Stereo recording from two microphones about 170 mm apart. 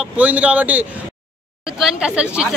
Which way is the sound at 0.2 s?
10° right (ahead or behind).